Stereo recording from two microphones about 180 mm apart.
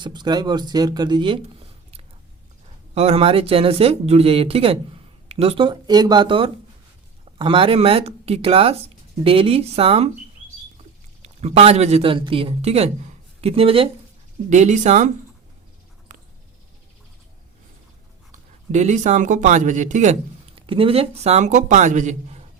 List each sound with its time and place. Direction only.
0.0 s speech: 25° right (ahead or behind)
11.2 s speech: 35° right (ahead or behind)
16.1 s a sound: 45° right (ahead or behind)
18.3 s speech: 40° right (ahead or behind)
20.6 s speech: 30° right (ahead or behind)